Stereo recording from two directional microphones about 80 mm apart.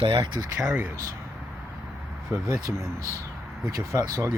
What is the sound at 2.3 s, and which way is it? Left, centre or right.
Speech, right.